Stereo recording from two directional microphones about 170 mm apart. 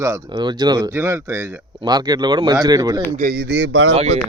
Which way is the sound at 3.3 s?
90° right.